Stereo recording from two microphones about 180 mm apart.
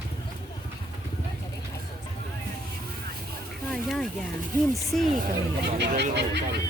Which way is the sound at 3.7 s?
Centre (ahead or behind).